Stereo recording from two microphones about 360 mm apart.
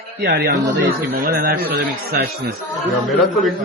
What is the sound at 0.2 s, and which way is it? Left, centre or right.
Speech, right.